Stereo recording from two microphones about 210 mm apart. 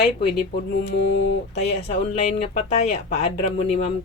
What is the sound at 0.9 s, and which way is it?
Speech, 55° left (ahead or behind).